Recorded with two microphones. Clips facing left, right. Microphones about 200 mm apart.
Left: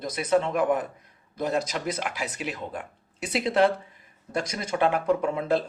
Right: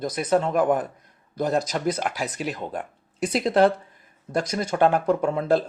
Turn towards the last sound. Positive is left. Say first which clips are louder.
# right 3 dB
turn(degrees=-40)  # may be behind; listen again after turning